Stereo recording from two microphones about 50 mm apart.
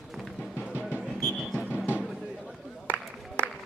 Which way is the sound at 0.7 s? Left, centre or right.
Right.